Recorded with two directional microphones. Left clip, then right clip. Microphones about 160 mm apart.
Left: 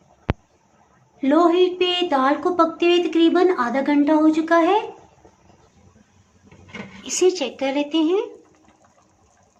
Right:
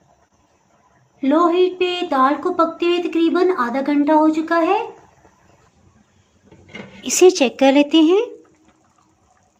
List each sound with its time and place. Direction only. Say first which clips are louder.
1.2 s speech: right 1 dB; 15° right (ahead or behind)
7.0 s a woman's voice: right 7 dB; 40° right (ahead or behind)